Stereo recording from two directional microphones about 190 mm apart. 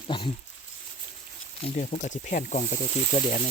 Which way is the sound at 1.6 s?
40° left (ahead or behind).